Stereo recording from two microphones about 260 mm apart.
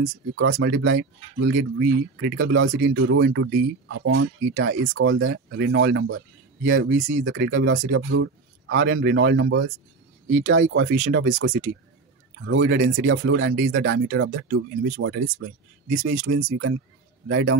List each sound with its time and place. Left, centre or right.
0.0 s speech: right
17.3 s speech: right